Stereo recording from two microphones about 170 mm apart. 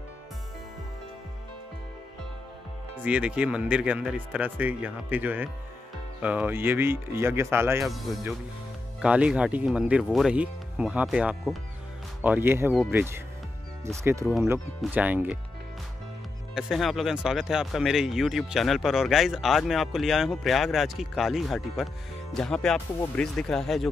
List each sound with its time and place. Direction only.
3.0 s speech: 5° right (ahead or behind)
7.8 s speech: centre (ahead or behind)
16.5 s speech: centre (ahead or behind)